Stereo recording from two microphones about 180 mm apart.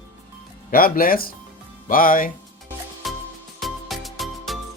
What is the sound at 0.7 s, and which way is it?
Speech, 50° left (ahead or behind).